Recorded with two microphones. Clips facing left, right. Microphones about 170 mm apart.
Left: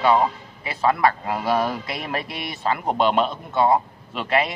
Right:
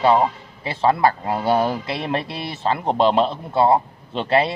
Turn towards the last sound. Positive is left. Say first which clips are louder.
# right 4 dB
turn(degrees=-30)  # may be behind; listen again after turning